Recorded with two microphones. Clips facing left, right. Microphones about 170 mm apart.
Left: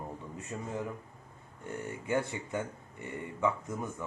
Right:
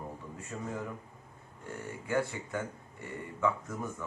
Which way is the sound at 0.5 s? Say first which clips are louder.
Left 1 dB; 20° left (ahead or behind).